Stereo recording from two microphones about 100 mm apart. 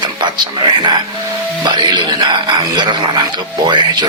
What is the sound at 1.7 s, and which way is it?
Speech, 50° right (ahead or behind).